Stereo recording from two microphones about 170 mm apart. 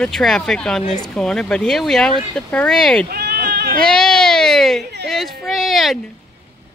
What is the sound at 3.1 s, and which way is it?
Bleat, 70° right (ahead or behind).